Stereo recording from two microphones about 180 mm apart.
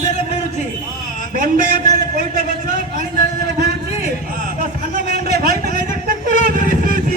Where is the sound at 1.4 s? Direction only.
40° right (ahead or behind).